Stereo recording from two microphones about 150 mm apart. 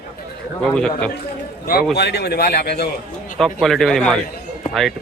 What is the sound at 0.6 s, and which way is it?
Speech, 5° left (ahead or behind).